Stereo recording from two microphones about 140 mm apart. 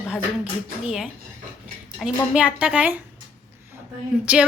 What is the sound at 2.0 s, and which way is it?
A woman's voice, 5° right (ahead or behind).